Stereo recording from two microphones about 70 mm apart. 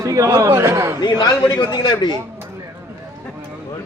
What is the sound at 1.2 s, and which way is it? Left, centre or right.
Speech, left.